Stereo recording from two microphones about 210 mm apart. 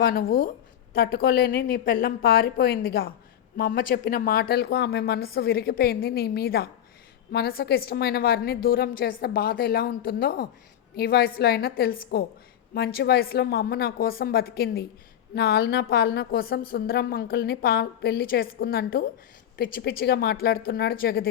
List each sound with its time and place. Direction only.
0.0 s a woman's voice: 45° left (ahead or behind)